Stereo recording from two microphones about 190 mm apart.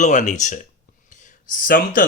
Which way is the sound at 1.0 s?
40° left (ahead or behind).